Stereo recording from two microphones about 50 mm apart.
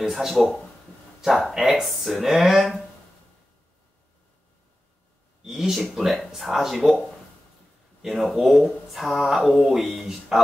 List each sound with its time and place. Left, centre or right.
0.1 s speech: centre
5.4 s speech: centre